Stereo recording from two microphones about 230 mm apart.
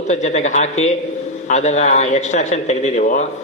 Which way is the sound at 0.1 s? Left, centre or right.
Left.